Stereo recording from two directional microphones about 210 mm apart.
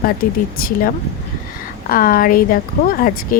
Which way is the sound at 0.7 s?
45° left (ahead or behind).